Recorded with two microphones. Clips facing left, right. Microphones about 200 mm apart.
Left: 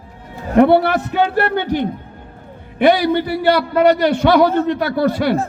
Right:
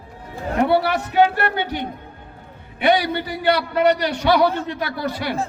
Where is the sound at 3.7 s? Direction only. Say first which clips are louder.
Left 5 dB; 55° left (ahead or behind).